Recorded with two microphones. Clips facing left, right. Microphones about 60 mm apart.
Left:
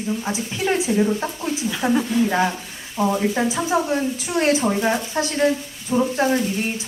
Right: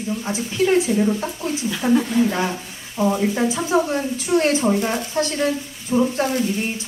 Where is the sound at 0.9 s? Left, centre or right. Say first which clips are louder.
Even; centre.